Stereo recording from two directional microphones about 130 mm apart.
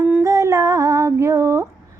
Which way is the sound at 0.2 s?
25° right (ahead or behind).